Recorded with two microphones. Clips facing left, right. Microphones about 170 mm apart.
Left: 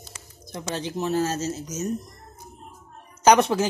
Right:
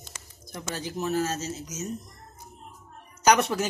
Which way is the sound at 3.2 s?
25° left (ahead or behind).